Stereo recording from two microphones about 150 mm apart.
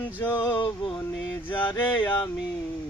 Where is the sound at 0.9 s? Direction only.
10° left (ahead or behind).